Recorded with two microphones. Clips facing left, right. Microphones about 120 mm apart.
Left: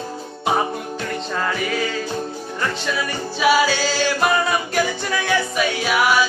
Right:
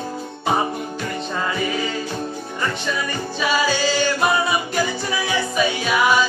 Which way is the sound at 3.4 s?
5° left (ahead or behind).